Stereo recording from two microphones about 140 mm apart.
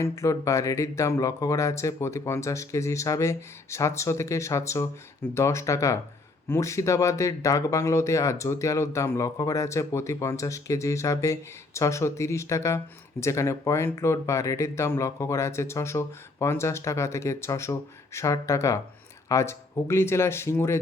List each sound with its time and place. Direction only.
0.0 s speech: 20° left (ahead or behind)